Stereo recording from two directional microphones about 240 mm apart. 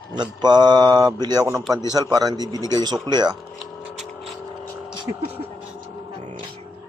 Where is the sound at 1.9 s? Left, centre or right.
Centre.